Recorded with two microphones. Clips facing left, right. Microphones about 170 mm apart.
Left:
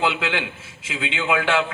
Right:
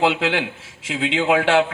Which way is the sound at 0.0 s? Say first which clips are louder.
Right 4 dB; 40° right (ahead or behind).